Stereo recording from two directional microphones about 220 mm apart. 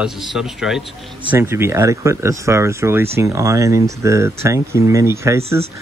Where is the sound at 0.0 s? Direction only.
Centre (ahead or behind).